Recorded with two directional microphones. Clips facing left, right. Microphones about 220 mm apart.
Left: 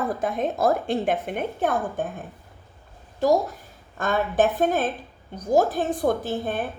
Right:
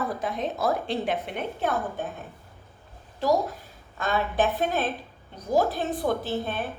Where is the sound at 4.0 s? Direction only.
50° left (ahead or behind).